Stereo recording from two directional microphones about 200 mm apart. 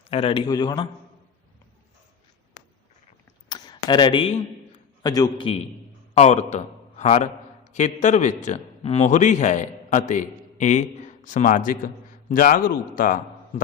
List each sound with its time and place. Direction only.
0.1 s a man's voice: 30° left (ahead or behind)
3.5 s a sound: 20° left (ahead or behind)
5.0 s a man's voice: 20° left (ahead or behind); by 13.2 s 45° left (ahead or behind)